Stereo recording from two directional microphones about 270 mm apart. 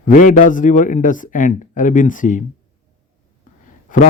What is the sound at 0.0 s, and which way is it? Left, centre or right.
Speech, left.